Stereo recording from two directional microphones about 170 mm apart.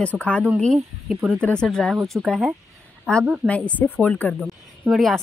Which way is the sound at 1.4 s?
5° left (ahead or behind).